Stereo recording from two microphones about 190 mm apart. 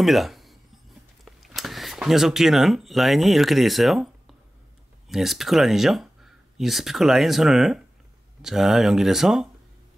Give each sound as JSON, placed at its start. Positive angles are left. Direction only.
{"t": 0.0, "sound": "speech", "side_deg": 0}